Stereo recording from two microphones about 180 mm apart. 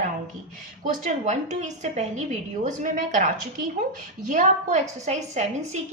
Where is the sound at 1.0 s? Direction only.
40° right (ahead or behind).